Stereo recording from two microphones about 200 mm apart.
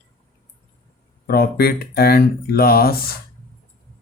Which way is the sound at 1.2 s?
50° left (ahead or behind).